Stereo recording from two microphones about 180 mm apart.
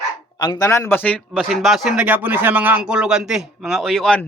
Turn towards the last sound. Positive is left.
turn(degrees=5)  # may be behind; listen again after turning